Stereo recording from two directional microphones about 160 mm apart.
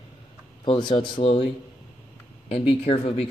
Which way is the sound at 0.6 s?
30° left (ahead or behind).